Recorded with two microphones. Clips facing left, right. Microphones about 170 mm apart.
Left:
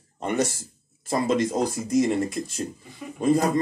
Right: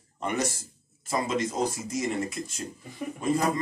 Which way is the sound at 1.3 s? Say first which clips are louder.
Left 6 dB; 60° left (ahead or behind).